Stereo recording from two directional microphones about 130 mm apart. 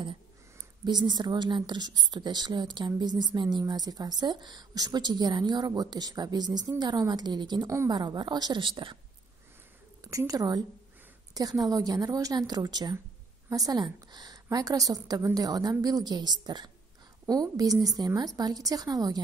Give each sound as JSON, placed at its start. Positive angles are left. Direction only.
{"t": 0.8, "sound": "a woman's voice", "side_deg": -35}
{"t": 10.0, "sound": "a woman's voice", "side_deg": -25}